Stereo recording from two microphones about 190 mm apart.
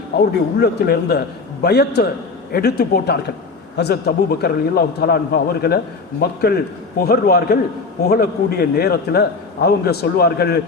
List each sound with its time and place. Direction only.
0.6 s a man's voice: 55° left (ahead or behind)